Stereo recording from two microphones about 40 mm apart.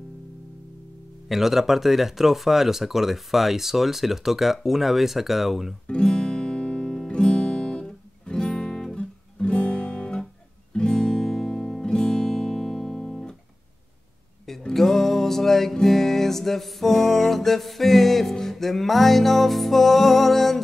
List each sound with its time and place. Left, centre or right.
1.3 s speech: centre
5.9 s guitar: centre
7.1 s music: left
8.9 s guitar: left
10.7 s music: centre
14.7 s music: centre